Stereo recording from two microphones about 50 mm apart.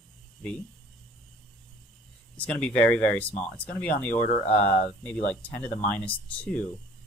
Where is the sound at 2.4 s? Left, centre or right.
Left.